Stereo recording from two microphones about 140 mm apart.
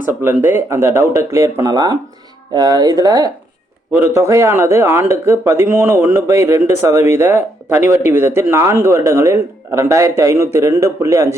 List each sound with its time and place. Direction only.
0.0 s speech: 15° right (ahead or behind)